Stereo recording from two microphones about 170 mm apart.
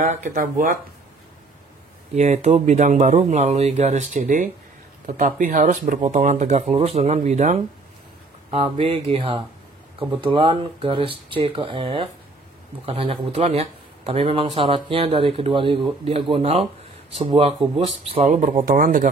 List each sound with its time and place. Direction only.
0.0 s speech: 50° right (ahead or behind)
2.1 s speech: 40° right (ahead or behind)